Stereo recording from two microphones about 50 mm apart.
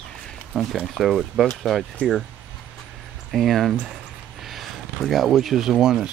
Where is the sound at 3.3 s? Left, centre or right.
Centre.